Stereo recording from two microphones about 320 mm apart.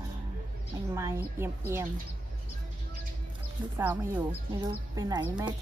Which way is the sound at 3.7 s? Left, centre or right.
Centre.